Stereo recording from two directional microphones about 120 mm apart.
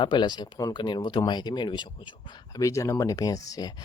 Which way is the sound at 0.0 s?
40° left (ahead or behind).